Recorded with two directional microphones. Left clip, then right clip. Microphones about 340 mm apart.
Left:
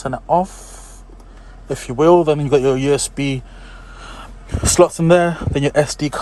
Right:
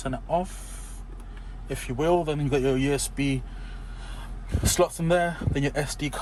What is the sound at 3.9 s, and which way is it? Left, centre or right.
Vehicle, centre.